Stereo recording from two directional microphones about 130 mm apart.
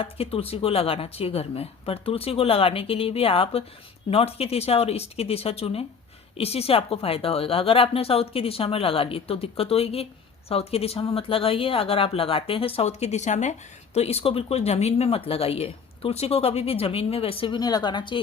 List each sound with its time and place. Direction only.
0.0 s speech: 45° left (ahead or behind)